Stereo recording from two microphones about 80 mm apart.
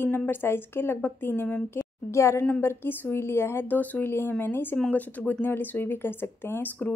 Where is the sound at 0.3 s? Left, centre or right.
Left.